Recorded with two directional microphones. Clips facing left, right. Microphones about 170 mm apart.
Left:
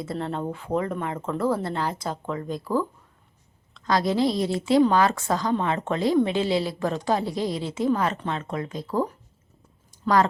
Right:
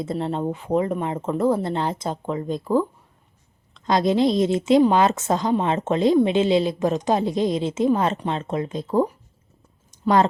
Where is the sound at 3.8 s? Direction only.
20° right (ahead or behind).